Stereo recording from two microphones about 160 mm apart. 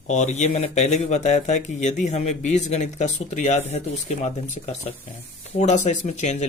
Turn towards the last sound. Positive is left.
turn(degrees=45)  # may be behind; listen again after turning